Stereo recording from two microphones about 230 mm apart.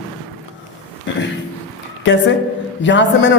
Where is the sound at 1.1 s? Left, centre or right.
Left.